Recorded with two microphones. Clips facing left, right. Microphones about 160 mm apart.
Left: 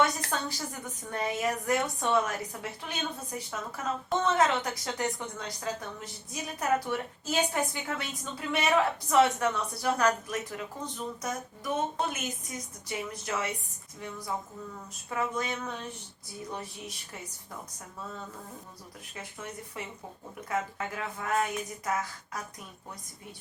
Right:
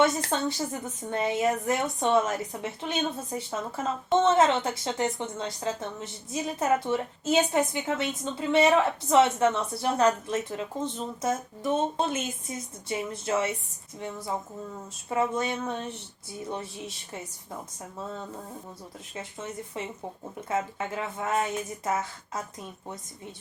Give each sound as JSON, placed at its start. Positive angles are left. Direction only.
{"t": 0.0, "sound": "a woman's voice", "side_deg": -25}
{"t": 19.1, "sound": "a woman's voice", "side_deg": -25}